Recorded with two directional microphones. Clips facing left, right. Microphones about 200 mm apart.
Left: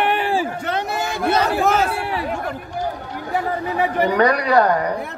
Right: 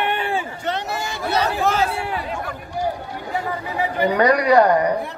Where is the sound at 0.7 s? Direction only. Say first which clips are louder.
Left 2 dB; 55° left (ahead or behind).